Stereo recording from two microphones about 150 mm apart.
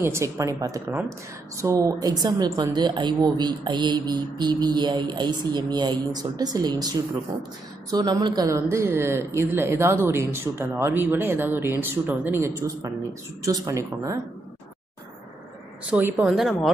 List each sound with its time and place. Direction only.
0.0 s a woman's voice: 20° right (ahead or behind)
15.9 s speech: 15° right (ahead or behind)
16.2 s speech: centre (ahead or behind)